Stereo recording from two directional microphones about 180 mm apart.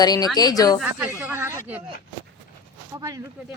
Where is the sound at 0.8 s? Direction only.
10° right (ahead or behind).